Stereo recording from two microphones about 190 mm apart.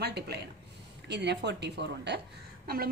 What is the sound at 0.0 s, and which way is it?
A woman's voice, 60° right (ahead or behind).